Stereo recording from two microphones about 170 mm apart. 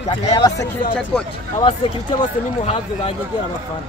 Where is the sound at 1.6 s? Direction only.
35° left (ahead or behind).